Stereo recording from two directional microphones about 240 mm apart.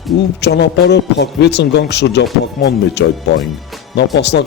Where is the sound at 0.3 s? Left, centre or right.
Left.